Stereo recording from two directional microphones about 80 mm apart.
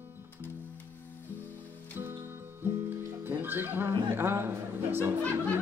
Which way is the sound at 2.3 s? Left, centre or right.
Right.